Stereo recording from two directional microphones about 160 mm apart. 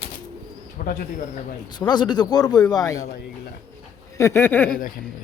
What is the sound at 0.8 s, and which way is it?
Bird, 60° left (ahead or behind).